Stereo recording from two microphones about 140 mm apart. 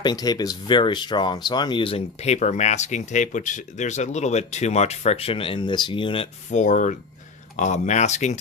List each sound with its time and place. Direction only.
0.0 s speech: 30° left (ahead or behind)
6.5 s speech: 60° left (ahead or behind)